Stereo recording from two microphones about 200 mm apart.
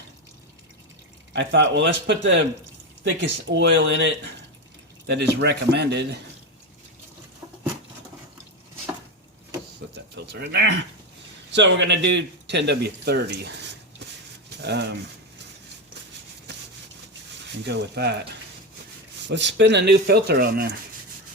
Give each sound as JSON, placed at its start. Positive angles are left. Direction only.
{"t": 1.3, "sound": "speech", "side_deg": -60}
{"t": 9.8, "sound": "a sound", "side_deg": -60}
{"t": 10.2, "sound": "speech", "side_deg": -55}
{"t": 14.6, "sound": "speech", "side_deg": -60}
{"t": 17.6, "sound": "speech", "side_deg": -55}
{"t": 19.3, "sound": "speech", "side_deg": -60}